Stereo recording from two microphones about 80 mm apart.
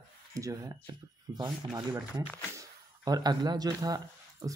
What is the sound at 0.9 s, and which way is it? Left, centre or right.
Speech, right.